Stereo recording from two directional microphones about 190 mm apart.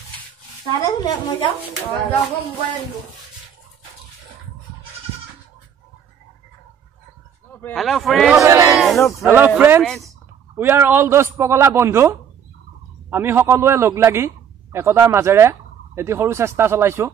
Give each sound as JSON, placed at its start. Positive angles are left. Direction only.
{"t": 0.7, "sound": "a woman's voice", "side_deg": 25}
{"t": 7.4, "sound": "a sound", "side_deg": 10}
{"t": 7.7, "sound": "speech", "side_deg": 0}
{"t": 8.5, "sound": "a man's voice", "side_deg": -15}
{"t": 8.7, "sound": "speech", "side_deg": 0}
{"t": 9.2, "sound": "a man's voice", "side_deg": -10}
{"t": 9.8, "sound": "speech", "side_deg": 0}
{"t": 10.5, "sound": "a man's voice", "side_deg": -10}